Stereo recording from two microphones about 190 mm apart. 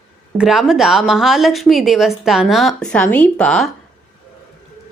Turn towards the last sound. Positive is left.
turn(degrees=5)  # may be behind; listen again after turning